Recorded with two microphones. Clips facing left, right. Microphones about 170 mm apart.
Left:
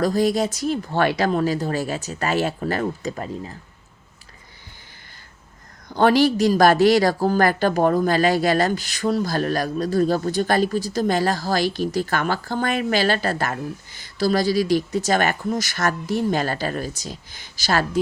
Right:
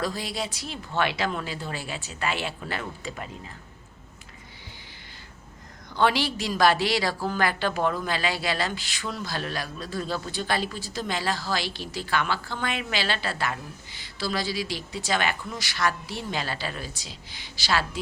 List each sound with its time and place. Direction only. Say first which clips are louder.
0.0 s a woman's voice: left 11 dB; 45° left (ahead or behind)
5.9 s a woman's voice: left 8 dB; 45° left (ahead or behind)